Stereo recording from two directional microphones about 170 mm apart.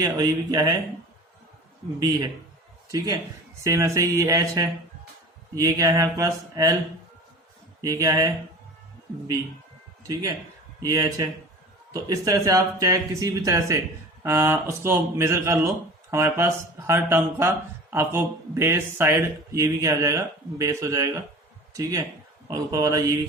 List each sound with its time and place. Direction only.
0.0 s speech: 20° right (ahead or behind)
2.0 s speech: 25° right (ahead or behind)
3.6 s speech: 20° right (ahead or behind)
7.8 s speech: 20° right (ahead or behind)
10.0 s a man's voice: 20° right (ahead or behind)